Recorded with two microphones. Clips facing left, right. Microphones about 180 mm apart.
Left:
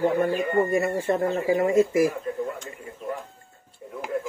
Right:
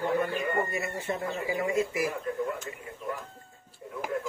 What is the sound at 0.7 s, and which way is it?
Speech, 45° left (ahead or behind).